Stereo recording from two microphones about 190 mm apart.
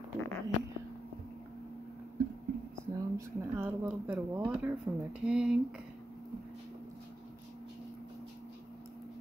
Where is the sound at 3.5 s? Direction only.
10° right (ahead or behind).